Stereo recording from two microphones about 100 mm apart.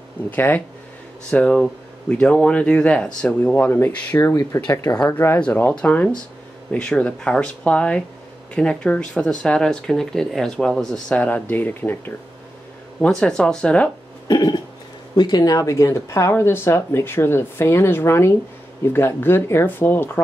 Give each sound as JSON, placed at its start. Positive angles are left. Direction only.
{"t": 0.3, "sound": "speech", "side_deg": 20}
{"t": 4.4, "sound": "speech", "side_deg": 30}
{"t": 4.9, "sound": "speech", "side_deg": 10}
{"t": 14.2, "sound": "burping", "side_deg": 45}
{"t": 15.1, "sound": "speech", "side_deg": 45}